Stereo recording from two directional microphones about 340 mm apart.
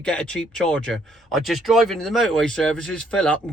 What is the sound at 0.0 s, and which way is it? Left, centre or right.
A man's voice, centre.